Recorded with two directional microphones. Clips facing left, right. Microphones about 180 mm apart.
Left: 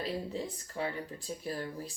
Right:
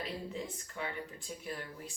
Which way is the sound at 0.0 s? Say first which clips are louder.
Left 4 dB; 35° left (ahead or behind).